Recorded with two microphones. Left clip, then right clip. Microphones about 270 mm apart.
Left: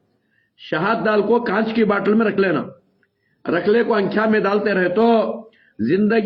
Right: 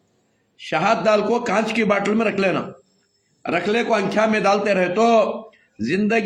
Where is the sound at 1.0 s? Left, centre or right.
Centre.